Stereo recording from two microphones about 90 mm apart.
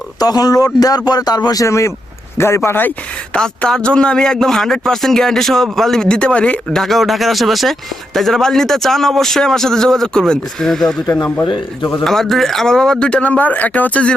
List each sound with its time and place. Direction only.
0.2 s speech: 45° left (ahead or behind)
1.6 s speech: 35° left (ahead or behind)
3.3 s a man's voice: 10° left (ahead or behind)
11.4 s speech: 60° left (ahead or behind)
12.0 s speech: 5° left (ahead or behind)